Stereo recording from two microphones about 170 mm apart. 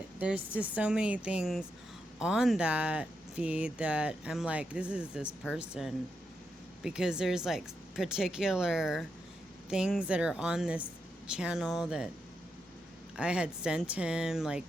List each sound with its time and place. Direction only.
0.2 s speech: 10° right (ahead or behind)
13.1 s speech: 5° right (ahead or behind)